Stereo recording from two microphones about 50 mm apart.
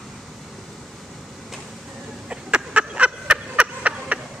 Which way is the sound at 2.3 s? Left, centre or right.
Right.